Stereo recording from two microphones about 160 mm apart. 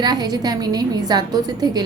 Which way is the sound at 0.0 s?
25° right (ahead or behind).